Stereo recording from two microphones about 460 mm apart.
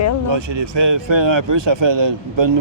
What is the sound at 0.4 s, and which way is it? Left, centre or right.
A man's voice, right.